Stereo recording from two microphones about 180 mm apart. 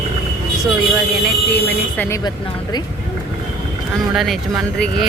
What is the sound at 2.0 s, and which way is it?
Speech, 15° left (ahead or behind).